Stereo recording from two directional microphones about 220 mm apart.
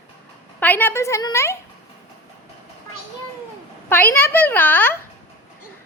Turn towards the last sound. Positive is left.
turn(degrees=10)  # may be behind; listen again after turning